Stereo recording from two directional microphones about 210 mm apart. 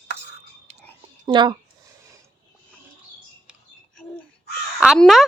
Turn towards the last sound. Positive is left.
turn(degrees=0)  # may be behind; listen again after turning